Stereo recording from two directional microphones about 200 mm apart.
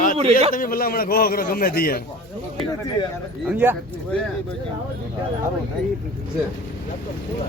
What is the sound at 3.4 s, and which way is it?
Speech, 10° right (ahead or behind).